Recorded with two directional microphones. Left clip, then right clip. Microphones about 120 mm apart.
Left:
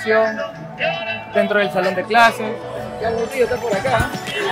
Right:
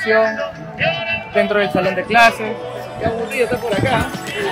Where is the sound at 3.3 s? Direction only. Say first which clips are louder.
Right 1 dB; centre (ahead or behind).